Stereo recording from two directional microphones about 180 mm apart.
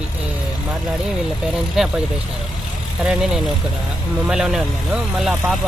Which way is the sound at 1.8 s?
5° right (ahead or behind).